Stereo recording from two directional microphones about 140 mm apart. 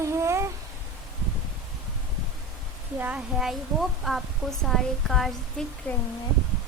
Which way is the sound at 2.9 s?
10° right (ahead or behind).